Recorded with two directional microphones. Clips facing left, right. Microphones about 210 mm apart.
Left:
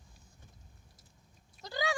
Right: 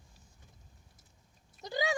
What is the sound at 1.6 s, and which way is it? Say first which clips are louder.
Speech: right 2 dB; 20° right (ahead or behind).